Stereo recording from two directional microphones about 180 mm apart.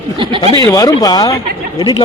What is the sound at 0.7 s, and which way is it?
Speech, 20° left (ahead or behind).